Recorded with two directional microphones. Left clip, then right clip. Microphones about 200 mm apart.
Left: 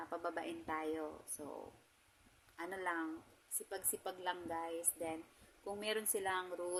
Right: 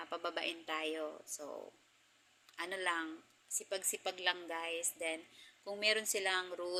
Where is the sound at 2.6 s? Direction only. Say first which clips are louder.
Right 3 dB; 15° left (ahead or behind).